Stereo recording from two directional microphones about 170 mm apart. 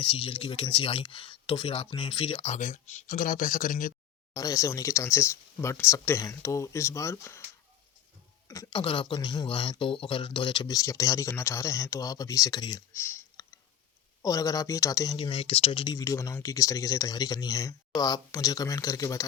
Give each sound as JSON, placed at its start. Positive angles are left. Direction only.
{"t": 0.0, "sound": "speech", "side_deg": 30}
{"t": 4.4, "sound": "speech", "side_deg": 20}
{"t": 8.4, "sound": "speech", "side_deg": 20}